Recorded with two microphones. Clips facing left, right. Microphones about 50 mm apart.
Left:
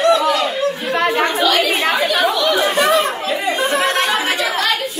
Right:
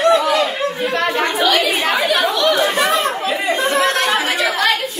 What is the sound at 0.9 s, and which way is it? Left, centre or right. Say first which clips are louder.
Chatter: left 4 dB; centre.